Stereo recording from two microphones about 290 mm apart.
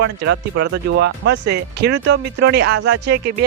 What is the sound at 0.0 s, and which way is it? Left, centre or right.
Speech, right.